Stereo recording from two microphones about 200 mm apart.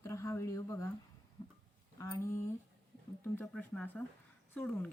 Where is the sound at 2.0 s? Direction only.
15° left (ahead or behind).